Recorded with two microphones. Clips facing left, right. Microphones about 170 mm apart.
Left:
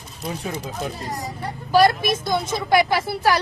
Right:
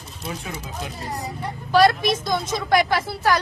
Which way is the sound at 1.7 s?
Centre (ahead or behind).